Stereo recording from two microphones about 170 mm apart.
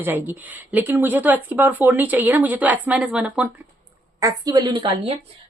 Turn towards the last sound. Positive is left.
turn(degrees=-25)  # may be behind; listen again after turning